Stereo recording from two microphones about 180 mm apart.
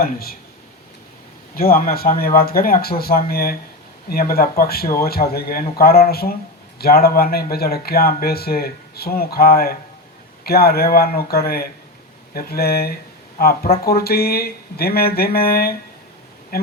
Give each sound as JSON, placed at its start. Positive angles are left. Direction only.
{"t": 0.0, "sound": "speech", "side_deg": 55}
{"t": 1.5, "sound": "speech", "side_deg": 55}